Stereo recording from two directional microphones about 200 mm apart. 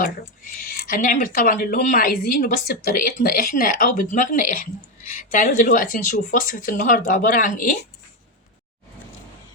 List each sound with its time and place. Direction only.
0.7 s a woman's voice: 45° left (ahead or behind)